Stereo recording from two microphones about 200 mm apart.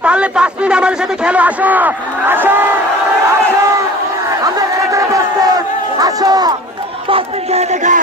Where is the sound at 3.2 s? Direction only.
15° right (ahead or behind).